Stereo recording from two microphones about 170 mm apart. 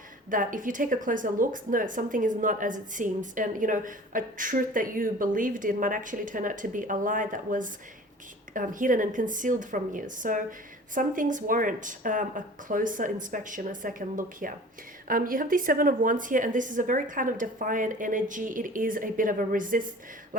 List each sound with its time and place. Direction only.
0.3 s a woman's voice: 50° right (ahead or behind)